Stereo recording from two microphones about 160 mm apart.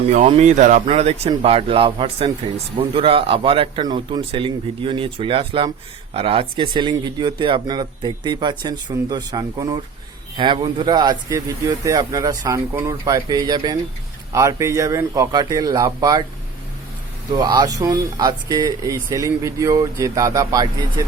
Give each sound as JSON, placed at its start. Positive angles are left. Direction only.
{"t": 0.3, "sound": "speech", "side_deg": -50}
{"t": 17.3, "sound": "speech", "side_deg": -25}